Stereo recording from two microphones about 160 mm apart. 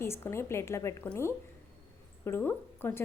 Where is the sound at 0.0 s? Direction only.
15° left (ahead or behind).